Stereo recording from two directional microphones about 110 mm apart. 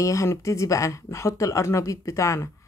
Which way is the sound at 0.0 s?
30° left (ahead or behind).